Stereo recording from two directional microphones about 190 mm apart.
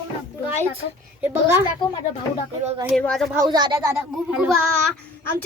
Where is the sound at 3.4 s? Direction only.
20° right (ahead or behind).